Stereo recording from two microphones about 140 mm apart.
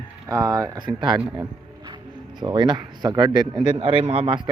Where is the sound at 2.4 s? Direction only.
35° right (ahead or behind).